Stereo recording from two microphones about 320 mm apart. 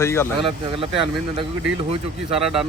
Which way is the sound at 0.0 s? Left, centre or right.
Centre.